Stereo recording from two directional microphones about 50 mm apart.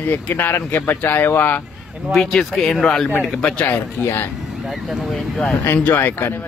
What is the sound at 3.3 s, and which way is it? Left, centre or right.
Speech, centre.